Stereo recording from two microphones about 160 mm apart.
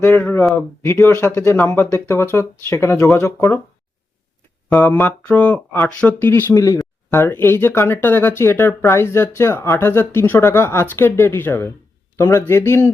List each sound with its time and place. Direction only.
0.0 s speech: 15° left (ahead or behind)
4.7 s speech: 10° left (ahead or behind)